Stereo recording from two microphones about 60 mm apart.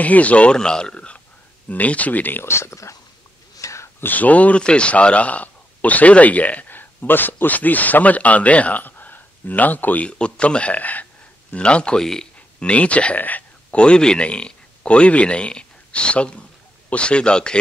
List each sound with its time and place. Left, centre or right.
0.0 s speech: left
2.4 s speech: left
3.5 s a sound: left
4.0 s speech: left
10.0 s speech: centre